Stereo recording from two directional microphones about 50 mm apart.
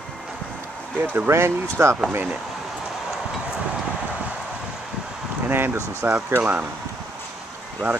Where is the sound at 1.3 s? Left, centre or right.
Right.